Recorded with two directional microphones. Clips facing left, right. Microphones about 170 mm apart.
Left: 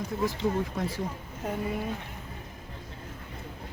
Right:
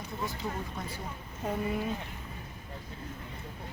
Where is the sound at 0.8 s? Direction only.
90° left.